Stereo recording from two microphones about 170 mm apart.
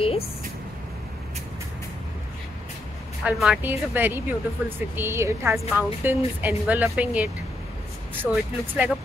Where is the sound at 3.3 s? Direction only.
5° right (ahead or behind).